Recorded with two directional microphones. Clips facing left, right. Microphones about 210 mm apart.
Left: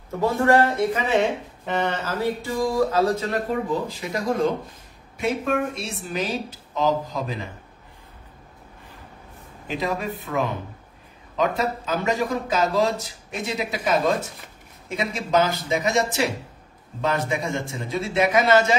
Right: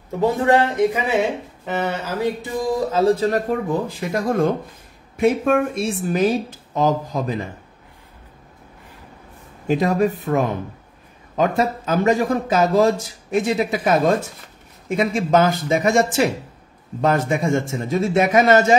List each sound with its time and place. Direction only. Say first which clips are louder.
0.2 s speech: right 2 dB; 15° right (ahead or behind); by 3.4 s 35° right (ahead or behind)
4.0 s a man's voice: right 4 dB; 55° right (ahead or behind)
9.7 s a man's voice: right 9 dB; 45° right (ahead or behind)